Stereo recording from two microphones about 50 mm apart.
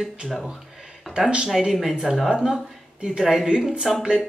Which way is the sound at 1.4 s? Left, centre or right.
Centre.